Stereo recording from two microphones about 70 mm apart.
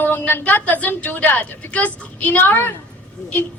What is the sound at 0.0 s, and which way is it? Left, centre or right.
A woman's voice, left.